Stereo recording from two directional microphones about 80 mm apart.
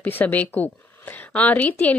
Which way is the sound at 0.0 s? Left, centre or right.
Left.